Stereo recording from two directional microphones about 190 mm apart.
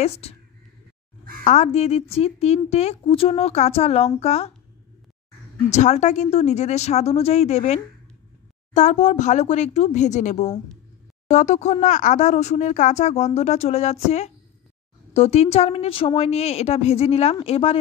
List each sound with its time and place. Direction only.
0.0 s speech: 35° left (ahead or behind)
1.4 s speech: 40° left (ahead or behind)
5.7 s speech: 40° left (ahead or behind)